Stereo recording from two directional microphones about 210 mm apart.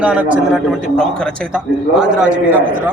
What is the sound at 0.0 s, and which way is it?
A man's voice, 5° right (ahead or behind).